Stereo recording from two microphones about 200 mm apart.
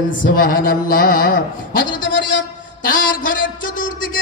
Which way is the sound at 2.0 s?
65° left (ahead or behind).